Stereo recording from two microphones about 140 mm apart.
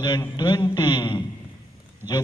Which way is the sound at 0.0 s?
30° left (ahead or behind).